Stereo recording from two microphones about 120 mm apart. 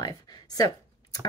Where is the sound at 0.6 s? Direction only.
30° left (ahead or behind).